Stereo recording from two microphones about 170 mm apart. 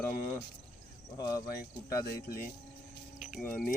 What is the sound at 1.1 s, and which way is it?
Speech, 25° left (ahead or behind).